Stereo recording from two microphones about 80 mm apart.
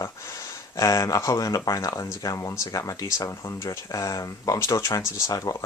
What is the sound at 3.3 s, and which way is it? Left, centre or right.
Speech, left.